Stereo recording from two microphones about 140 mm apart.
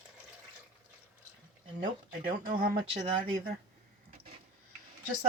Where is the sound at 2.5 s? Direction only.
90° right.